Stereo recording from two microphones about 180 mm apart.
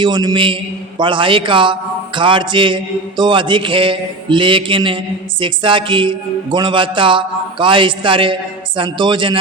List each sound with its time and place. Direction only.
0.0 s a man's voice: 25° right (ahead or behind)